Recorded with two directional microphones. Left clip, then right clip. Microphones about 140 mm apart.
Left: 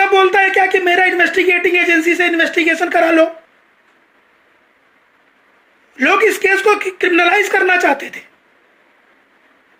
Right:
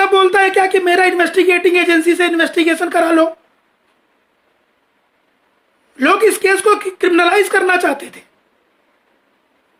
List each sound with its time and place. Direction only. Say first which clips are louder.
0.0 s speech: even; 35° right (ahead or behind)
6.0 s speech: even; 30° right (ahead or behind)